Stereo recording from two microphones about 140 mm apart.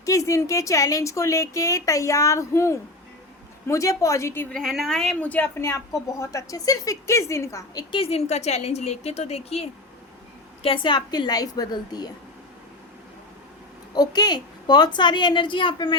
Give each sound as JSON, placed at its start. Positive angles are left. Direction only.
{"t": 0.0, "sound": "a woman's voice", "side_deg": 25}
{"t": 4.5, "sound": "a woman's voice", "side_deg": 0}
{"t": 7.9, "sound": "a woman's voice", "side_deg": 45}
{"t": 13.9, "sound": "a woman's voice", "side_deg": 30}